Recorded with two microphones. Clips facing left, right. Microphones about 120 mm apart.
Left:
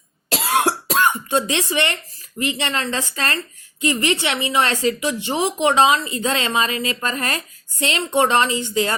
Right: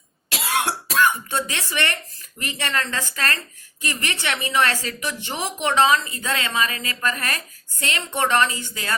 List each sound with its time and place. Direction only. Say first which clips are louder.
0.3 s cough: left 5 dB; 50° left (ahead or behind)
1.0 s a woman's voice: left 3 dB; 20° left (ahead or behind)